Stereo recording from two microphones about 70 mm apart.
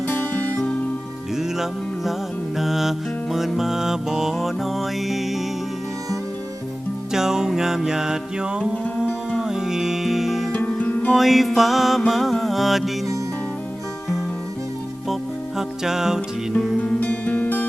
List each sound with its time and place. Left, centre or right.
0.1 s music: left
2.6 s music: centre
7.1 s music: centre
10.5 s music: left
11.1 s music: centre
15.1 s music: centre
16.8 s music: left